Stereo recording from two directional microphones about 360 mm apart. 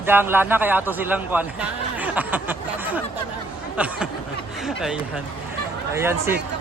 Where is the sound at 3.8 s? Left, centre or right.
Centre.